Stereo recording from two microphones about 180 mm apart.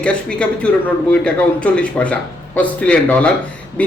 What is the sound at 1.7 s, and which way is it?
A man's voice, 5° left (ahead or behind).